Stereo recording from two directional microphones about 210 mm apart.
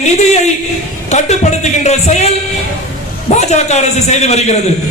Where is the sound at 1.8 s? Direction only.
30° left (ahead or behind).